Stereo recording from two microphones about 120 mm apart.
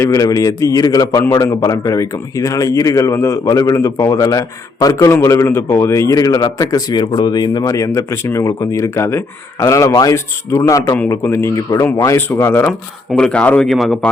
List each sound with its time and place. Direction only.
0.0 s a man's voice: 30° left (ahead or behind)
1.2 s a man's voice: 20° left (ahead or behind)
13.1 s speech: 5° left (ahead or behind)